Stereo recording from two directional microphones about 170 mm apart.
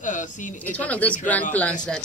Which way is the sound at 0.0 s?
50° left (ahead or behind).